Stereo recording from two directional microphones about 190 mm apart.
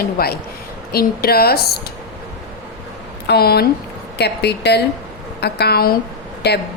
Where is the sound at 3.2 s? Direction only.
55° left (ahead or behind).